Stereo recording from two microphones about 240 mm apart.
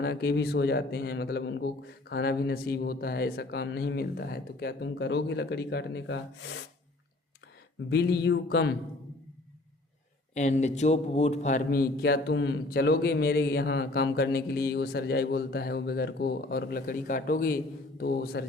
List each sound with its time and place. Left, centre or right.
0.0 s speech: left
7.9 s speech: left
10.3 s a man's voice: left